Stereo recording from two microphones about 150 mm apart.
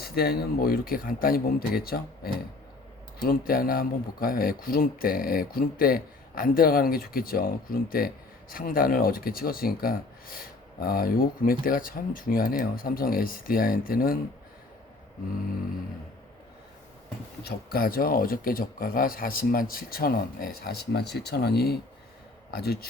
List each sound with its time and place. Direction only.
0.0 s speech: 90° left
3.2 s speech: 75° left (ahead or behind)
17.4 s a man's voice: 85° left